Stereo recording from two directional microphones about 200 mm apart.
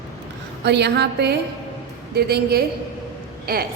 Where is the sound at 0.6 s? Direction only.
55° right (ahead or behind).